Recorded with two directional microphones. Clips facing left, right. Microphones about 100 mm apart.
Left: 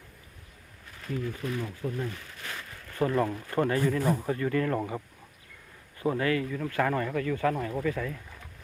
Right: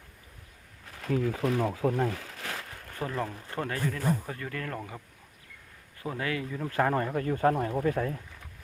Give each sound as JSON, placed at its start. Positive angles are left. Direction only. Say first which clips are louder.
{"t": 1.0, "sound": "speech", "louder": "right 5 dB", "side_deg": -90}
{"t": 3.0, "sound": "speech", "louder": "left 7 dB", "side_deg": 5}
{"t": 6.1, "sound": "speech", "louder": "left 1 dB", "side_deg": -10}
{"t": 6.7, "sound": "speech", "louder": "right 2 dB", "side_deg": -30}